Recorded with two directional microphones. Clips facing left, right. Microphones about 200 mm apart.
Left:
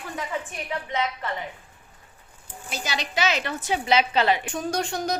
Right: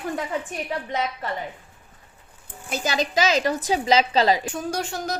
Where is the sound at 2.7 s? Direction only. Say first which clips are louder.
Right 7 dB; 45° right (ahead or behind).